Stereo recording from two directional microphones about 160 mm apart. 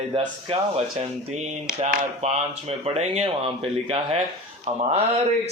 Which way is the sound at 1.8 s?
40° right (ahead or behind).